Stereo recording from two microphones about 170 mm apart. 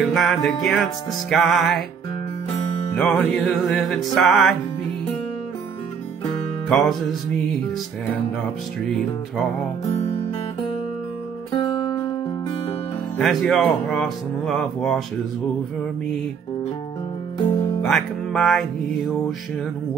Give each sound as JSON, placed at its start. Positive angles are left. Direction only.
{"t": 0.0, "sound": "speech", "side_deg": 0}
{"t": 3.0, "sound": "speech", "side_deg": 5}
{"t": 6.7, "sound": "speech", "side_deg": 0}
{"t": 9.8, "sound": "music", "side_deg": 40}
{"t": 13.2, "sound": "speech", "side_deg": 0}
{"t": 17.8, "sound": "speech", "side_deg": 0}